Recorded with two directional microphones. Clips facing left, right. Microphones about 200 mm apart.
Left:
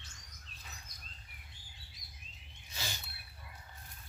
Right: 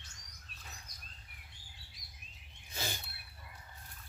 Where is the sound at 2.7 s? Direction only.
50° right (ahead or behind).